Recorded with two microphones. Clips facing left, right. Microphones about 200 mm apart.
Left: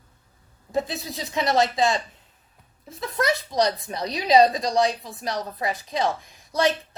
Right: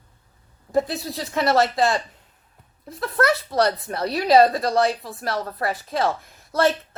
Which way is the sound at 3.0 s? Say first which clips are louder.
Right 3 dB; 15° left (ahead or behind).